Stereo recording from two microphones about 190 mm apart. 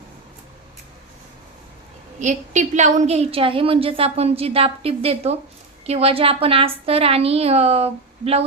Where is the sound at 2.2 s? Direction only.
40° right (ahead or behind).